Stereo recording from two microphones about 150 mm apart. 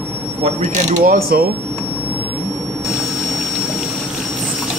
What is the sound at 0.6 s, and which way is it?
Speech, 55° right (ahead or behind).